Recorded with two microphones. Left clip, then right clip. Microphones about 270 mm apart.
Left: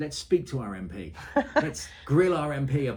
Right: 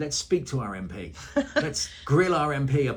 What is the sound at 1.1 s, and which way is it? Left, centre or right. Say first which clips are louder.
Speech: left 1 dB; left.